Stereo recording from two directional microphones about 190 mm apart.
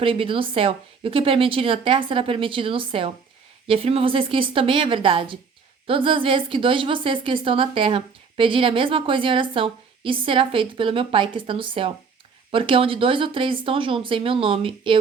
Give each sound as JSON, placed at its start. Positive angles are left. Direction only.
{"t": 0.0, "sound": "a woman's voice", "side_deg": -30}